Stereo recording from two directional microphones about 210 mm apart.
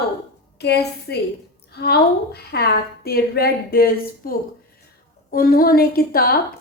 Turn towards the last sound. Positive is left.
turn(degrees=45)  # may be behind; listen again after turning